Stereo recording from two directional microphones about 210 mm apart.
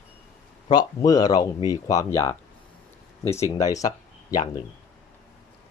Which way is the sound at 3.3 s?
15° left (ahead or behind).